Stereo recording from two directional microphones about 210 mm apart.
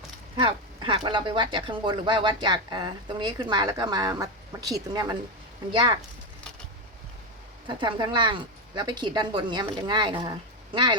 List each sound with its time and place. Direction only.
0.3 s speech: 20° right (ahead or behind)
7.8 s speech: 20° right (ahead or behind)